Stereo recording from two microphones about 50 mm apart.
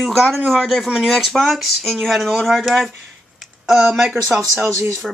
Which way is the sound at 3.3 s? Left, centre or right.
Centre.